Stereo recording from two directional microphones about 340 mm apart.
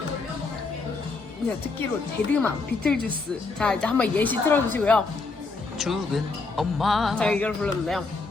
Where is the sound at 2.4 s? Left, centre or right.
Centre.